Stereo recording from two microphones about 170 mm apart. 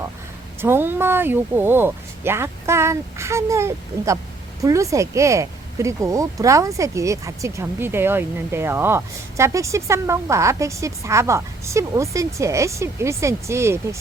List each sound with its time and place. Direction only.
0.6 s speech: 15° right (ahead or behind)